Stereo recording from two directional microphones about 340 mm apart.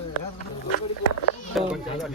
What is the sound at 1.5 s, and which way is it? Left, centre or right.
Speech, centre.